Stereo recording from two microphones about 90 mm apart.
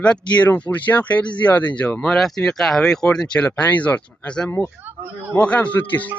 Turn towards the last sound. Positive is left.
turn(degrees=20)  # may be behind; listen again after turning